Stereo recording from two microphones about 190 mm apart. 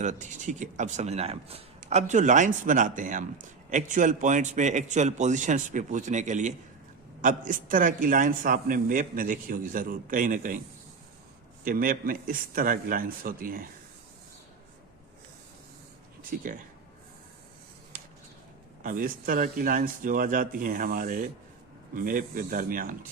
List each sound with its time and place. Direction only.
0.0 s a man's voice: 40° right (ahead or behind)
11.6 s a man's voice: 45° right (ahead or behind)
16.3 s a man's voice: 45° right (ahead or behind)
18.8 s a man's voice: 45° right (ahead or behind)